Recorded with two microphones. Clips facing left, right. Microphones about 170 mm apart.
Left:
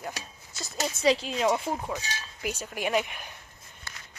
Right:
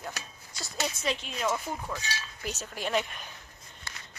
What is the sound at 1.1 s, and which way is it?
Speech, 35° left (ahead or behind).